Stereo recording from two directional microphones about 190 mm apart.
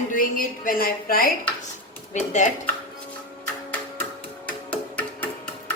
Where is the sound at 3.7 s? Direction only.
10° left (ahead or behind).